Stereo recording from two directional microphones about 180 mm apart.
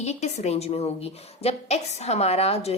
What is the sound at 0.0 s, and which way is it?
A woman's voice, 40° left (ahead or behind).